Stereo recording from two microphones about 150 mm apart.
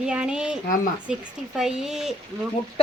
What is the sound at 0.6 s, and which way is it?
Speech, 70° left (ahead or behind).